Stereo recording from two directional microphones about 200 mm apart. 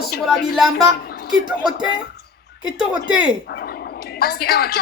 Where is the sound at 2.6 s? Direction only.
5° right (ahead or behind).